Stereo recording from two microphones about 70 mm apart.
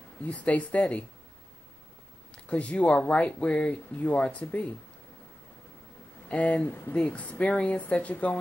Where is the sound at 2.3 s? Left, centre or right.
Centre.